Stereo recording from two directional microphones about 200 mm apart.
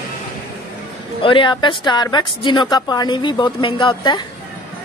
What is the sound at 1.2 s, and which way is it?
Speech, 25° left (ahead or behind).